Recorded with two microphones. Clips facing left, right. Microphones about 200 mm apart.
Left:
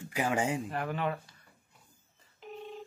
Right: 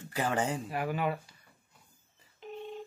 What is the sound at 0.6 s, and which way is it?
Speech, 10° right (ahead or behind).